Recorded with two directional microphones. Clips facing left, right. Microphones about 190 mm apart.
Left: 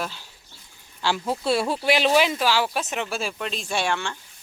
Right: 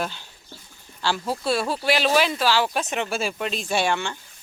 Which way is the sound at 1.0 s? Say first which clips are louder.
Even; 15° left (ahead or behind).